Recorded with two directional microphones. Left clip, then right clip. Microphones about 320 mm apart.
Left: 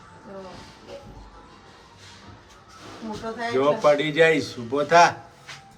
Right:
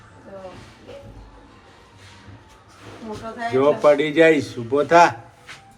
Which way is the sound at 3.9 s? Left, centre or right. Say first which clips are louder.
Right 3 dB; centre.